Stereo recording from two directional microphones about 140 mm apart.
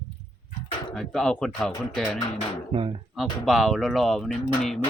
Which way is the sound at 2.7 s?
40° right (ahead or behind).